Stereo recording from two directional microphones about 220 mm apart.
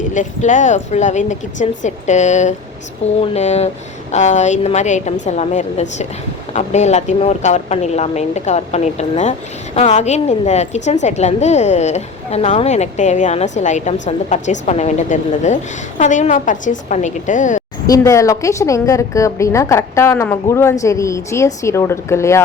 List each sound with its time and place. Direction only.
0.1 s a woman's voice: 35° left (ahead or behind)
17.8 s a woman's voice: 15° left (ahead or behind)